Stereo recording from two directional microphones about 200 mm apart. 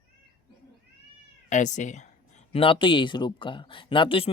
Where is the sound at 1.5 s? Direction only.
40° left (ahead or behind).